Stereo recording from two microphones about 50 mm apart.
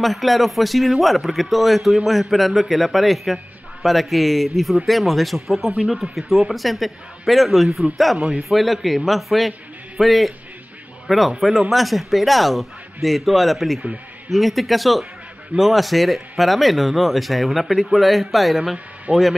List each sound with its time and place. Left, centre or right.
0.0 s speech: centre
19.1 s speech: right